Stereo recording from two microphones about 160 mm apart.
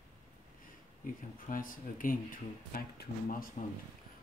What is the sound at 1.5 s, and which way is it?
Speech, 60° left (ahead or behind).